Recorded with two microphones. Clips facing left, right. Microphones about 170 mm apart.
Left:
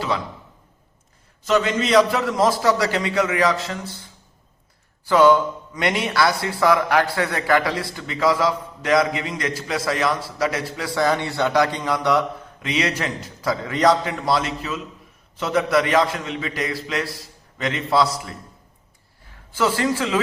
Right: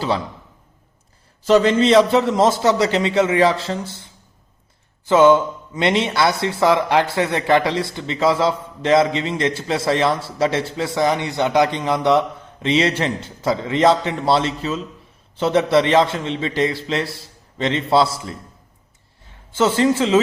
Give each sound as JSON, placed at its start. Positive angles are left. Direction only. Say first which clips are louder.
{"t": 1.5, "sound": "speech", "louder": "right 6 dB", "side_deg": -30}
{"t": 19.5, "sound": "speech", "louder": "right 4 dB", "side_deg": -25}